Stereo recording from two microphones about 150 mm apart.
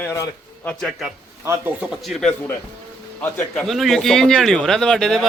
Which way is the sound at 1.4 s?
15° right (ahead or behind).